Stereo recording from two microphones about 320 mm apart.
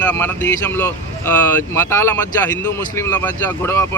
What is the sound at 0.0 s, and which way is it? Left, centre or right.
Speech, centre.